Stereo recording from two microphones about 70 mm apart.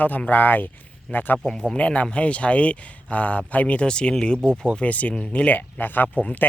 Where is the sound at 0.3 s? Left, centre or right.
Left.